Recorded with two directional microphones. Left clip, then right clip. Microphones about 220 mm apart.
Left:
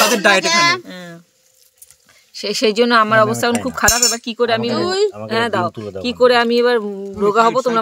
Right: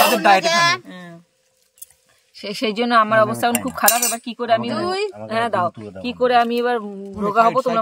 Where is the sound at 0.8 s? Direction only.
50° left (ahead or behind).